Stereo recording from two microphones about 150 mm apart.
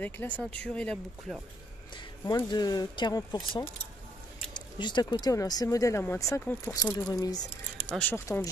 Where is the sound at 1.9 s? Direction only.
25° left (ahead or behind).